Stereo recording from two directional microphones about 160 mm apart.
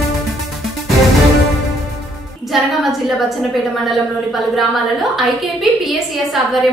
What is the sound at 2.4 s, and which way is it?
A woman's voice, centre (ahead or behind).